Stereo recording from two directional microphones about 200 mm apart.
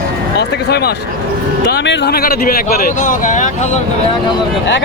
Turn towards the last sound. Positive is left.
turn(degrees=40)  # may be behind; listen again after turning